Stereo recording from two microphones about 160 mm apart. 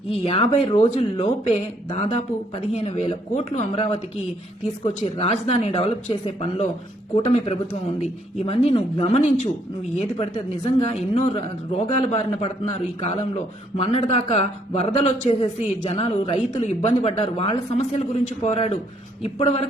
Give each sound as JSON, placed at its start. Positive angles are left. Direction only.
{"t": 0.1, "sound": "a man's voice", "side_deg": 35}